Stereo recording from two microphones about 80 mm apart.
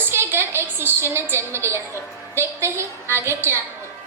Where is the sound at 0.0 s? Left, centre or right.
Right.